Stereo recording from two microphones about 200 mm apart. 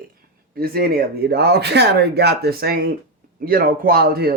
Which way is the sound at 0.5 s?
50° right (ahead or behind).